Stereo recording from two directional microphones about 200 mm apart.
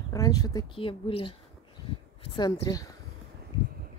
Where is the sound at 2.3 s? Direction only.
20° left (ahead or behind).